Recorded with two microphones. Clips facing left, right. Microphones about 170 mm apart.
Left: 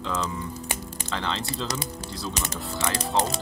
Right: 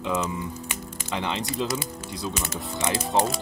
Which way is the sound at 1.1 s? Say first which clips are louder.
Right 2 dB; 15° right (ahead or behind).